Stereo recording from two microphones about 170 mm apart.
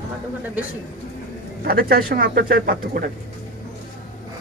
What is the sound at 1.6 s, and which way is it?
Speech, 60° right (ahead or behind).